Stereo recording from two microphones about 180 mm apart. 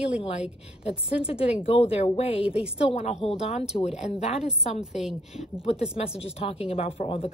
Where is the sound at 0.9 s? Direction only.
5° right (ahead or behind).